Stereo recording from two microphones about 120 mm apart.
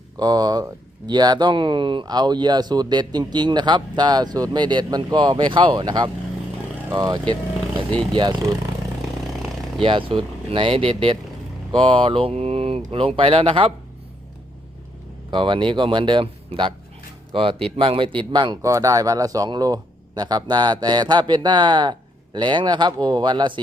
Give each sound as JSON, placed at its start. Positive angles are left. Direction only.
{"t": 0.2, "sound": "speech", "side_deg": -35}
{"t": 9.8, "sound": "speech", "side_deg": -50}
{"t": 15.3, "sound": "speech", "side_deg": -45}
{"t": 18.6, "sound": "speech", "side_deg": -25}